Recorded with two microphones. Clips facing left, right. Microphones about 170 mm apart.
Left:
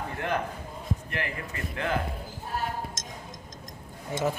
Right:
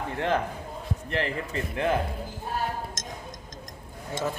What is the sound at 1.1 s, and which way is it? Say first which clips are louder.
Speech: right 5 dB; 30° right (ahead or behind).